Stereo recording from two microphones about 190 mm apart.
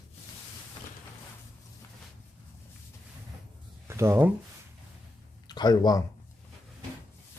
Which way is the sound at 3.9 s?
15° right (ahead or behind).